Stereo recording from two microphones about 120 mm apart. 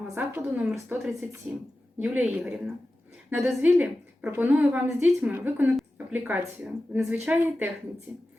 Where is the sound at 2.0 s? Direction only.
15° right (ahead or behind).